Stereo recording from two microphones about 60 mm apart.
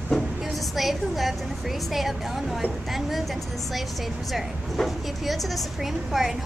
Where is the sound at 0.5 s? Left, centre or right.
Centre.